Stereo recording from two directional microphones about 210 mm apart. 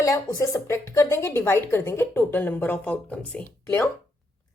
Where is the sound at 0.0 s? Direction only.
15° left (ahead or behind).